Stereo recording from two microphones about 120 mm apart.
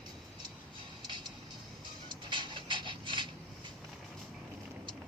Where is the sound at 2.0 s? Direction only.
40° right (ahead or behind).